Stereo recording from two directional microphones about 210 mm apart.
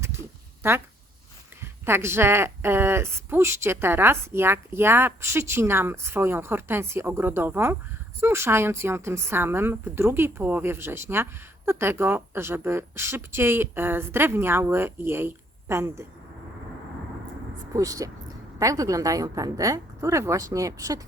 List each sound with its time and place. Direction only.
0.6 s a woman's voice: 10° right (ahead or behind)
1.8 s a woman's voice: 10° right (ahead or behind)
17.7 s a woman's voice: 15° right (ahead or behind)